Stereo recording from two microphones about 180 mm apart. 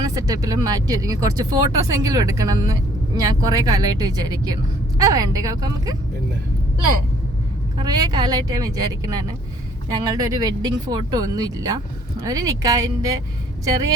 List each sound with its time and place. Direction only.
0.0 s a woman's voice: 20° right (ahead or behind)
7.8 s a woman's voice: 25° right (ahead or behind)